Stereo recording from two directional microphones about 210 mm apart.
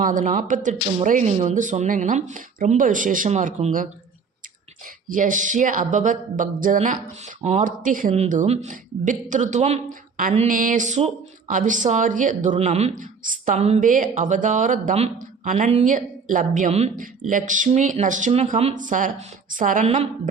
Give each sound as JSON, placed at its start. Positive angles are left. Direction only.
{"t": 0.0, "sound": "speech", "side_deg": -40}
{"t": 5.1, "sound": "speech", "side_deg": -40}